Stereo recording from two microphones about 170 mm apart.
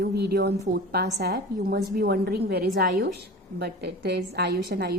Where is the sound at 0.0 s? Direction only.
70° right (ahead or behind).